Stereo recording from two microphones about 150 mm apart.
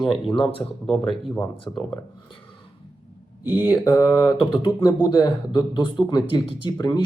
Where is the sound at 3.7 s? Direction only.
20° left (ahead or behind).